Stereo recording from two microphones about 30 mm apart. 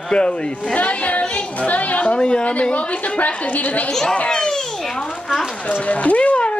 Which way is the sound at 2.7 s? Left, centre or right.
Left.